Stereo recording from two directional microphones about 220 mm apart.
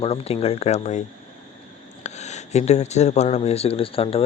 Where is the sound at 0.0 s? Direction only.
25° left (ahead or behind).